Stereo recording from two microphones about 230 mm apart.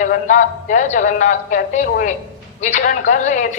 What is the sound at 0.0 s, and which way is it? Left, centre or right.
A woman's voice, left.